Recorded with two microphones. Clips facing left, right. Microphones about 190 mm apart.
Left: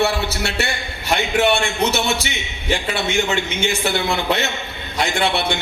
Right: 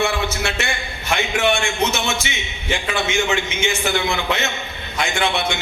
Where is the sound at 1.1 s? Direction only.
35° left (ahead or behind).